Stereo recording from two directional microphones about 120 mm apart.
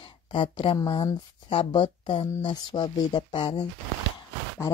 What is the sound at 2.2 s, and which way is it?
Speech, 35° left (ahead or behind).